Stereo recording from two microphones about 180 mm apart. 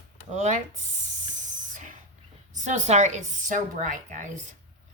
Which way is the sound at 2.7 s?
40° right (ahead or behind).